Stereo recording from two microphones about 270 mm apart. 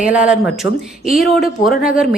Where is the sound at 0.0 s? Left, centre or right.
Centre.